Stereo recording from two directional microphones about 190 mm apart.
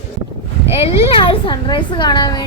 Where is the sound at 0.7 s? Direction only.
30° left (ahead or behind).